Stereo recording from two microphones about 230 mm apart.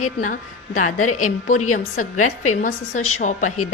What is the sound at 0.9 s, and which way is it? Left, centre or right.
Speech, left.